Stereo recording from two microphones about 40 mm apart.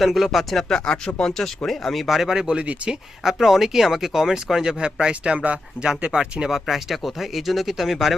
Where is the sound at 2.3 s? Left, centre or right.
Centre.